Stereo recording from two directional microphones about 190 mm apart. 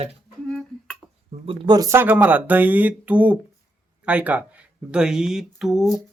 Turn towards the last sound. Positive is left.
turn(degrees=0)  # may be behind; listen again after turning